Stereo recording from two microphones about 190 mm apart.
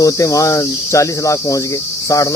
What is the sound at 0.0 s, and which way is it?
Cricket, 15° left (ahead or behind).